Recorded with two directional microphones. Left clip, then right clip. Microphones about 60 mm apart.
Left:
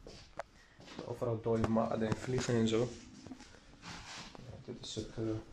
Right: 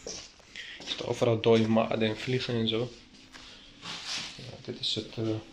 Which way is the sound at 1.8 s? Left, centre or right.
Right.